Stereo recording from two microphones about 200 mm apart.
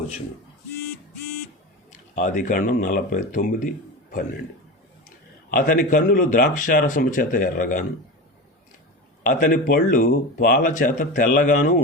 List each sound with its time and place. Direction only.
1.9 s speech: 40° left (ahead or behind)
5.5 s speech: 45° left (ahead or behind)
9.2 s speech: 45° left (ahead or behind)